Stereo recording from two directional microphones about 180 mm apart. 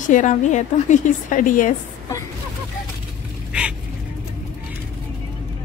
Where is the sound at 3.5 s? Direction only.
5° right (ahead or behind).